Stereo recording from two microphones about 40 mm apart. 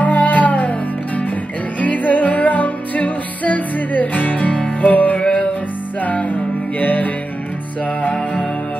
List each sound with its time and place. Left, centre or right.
0.0 s music: left